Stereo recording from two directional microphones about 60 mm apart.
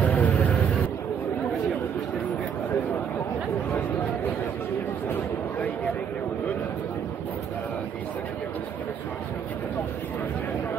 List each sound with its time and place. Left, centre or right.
0.0 s vehicle: left